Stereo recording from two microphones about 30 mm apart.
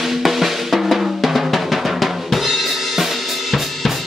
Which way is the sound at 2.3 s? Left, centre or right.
Centre.